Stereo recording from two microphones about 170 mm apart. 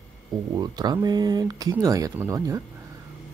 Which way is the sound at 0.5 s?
25° right (ahead or behind).